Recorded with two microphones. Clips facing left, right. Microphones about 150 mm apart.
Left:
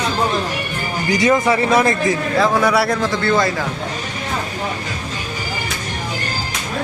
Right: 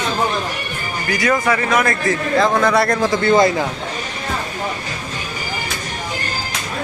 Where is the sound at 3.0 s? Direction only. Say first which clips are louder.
Right 3 dB; 20° right (ahead or behind).